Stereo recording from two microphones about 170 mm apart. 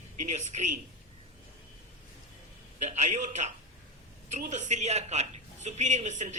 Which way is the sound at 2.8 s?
45° right (ahead or behind).